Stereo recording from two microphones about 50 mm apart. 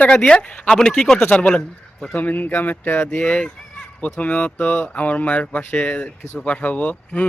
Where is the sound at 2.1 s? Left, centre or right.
Left.